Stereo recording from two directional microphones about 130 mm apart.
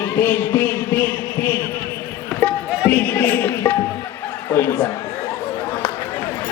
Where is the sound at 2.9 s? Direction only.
15° left (ahead or behind).